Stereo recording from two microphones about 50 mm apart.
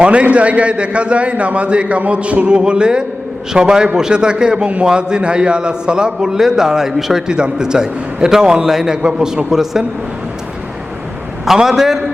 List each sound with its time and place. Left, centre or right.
0.0 s a man's voice: right
11.4 s a man's voice: centre